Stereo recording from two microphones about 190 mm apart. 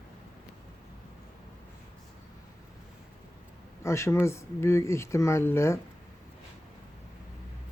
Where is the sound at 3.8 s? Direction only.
15° left (ahead or behind).